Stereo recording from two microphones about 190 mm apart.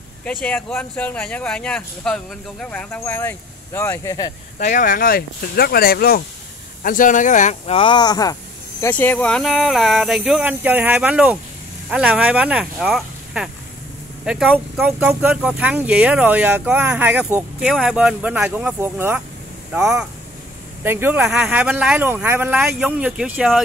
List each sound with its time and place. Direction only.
0.2 s speech: 10° left (ahead or behind)
4.6 s speech: 40° left (ahead or behind); by 23.6 s 5° right (ahead or behind)